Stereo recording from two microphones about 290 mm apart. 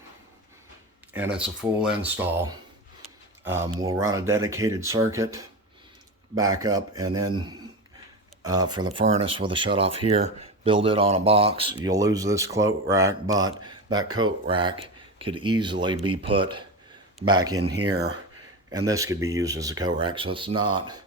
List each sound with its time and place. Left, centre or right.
1.1 s speech: centre
8.4 s speech: centre
17.6 s speech: right
18.9 s speech: centre